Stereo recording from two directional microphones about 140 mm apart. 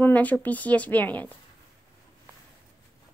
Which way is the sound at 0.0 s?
10° left (ahead or behind).